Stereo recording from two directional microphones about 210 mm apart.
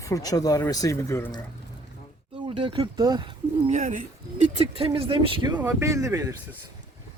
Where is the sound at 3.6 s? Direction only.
35° right (ahead or behind).